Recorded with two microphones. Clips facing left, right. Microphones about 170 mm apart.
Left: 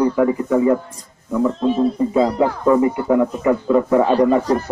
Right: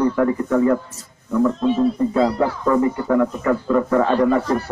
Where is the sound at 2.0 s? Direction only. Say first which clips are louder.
Left 2 dB; 15° left (ahead or behind).